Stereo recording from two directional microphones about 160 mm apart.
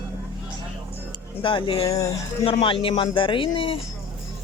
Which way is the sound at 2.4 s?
35° left (ahead or behind).